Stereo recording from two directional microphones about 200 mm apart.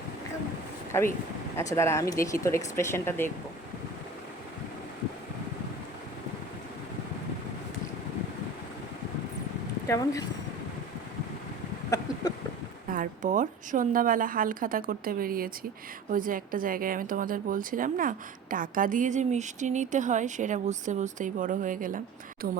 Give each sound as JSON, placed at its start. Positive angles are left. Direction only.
{"t": 0.9, "sound": "speech", "side_deg": 10}
{"t": 9.8, "sound": "speech", "side_deg": 15}
{"t": 12.9, "sound": "a woman's voice", "side_deg": -40}